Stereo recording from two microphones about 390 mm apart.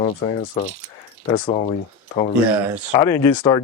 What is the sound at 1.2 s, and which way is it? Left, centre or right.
Speech, centre.